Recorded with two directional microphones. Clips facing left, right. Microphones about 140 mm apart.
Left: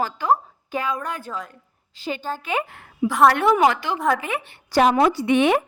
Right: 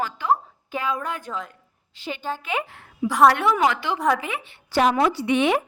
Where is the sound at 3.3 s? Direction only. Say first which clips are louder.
Left 3 dB; 45° left (ahead or behind).